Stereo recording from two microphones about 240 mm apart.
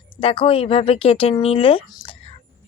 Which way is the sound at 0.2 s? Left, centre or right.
Left.